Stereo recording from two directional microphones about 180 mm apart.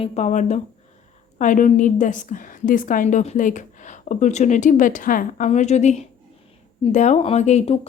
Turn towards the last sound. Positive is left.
turn(degrees=35)  # may be behind; listen again after turning